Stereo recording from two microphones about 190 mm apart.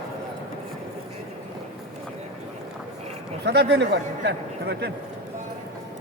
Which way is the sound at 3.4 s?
60° right (ahead or behind).